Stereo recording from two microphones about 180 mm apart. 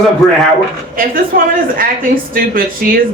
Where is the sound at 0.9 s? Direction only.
50° right (ahead or behind).